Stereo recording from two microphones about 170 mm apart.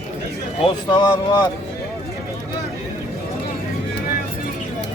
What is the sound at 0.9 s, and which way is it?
Speech, 25° left (ahead or behind).